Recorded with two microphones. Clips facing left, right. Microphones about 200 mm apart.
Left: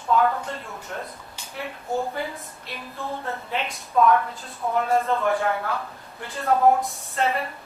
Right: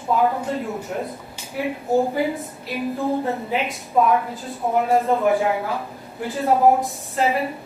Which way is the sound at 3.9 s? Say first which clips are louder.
Right 1 dB; 15° right (ahead or behind).